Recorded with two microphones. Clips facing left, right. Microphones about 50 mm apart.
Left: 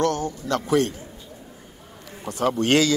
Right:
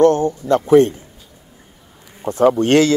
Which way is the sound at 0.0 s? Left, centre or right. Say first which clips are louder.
Right 10 dB; right.